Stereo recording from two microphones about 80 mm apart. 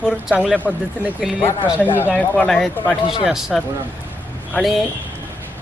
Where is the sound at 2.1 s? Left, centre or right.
Centre.